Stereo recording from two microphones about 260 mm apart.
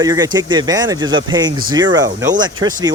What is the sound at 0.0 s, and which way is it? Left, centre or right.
Speech, centre.